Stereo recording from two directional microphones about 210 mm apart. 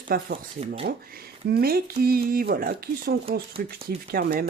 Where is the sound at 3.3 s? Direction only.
25° right (ahead or behind).